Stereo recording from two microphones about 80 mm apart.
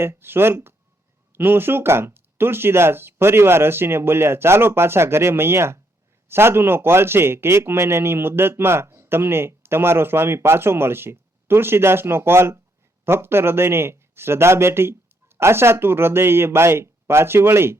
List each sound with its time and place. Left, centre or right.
0.0 s a man's voice: right